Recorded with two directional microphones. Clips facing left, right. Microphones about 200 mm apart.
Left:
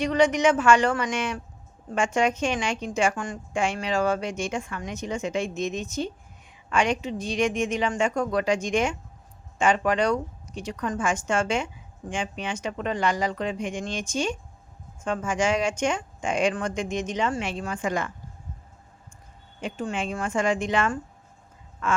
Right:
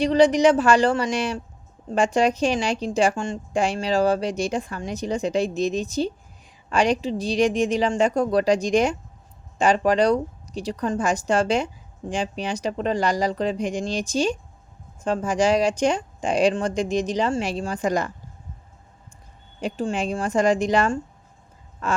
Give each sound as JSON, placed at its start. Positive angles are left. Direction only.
{"t": 0.0, "sound": "speech", "side_deg": -35}
{"t": 19.6, "sound": "speech", "side_deg": -35}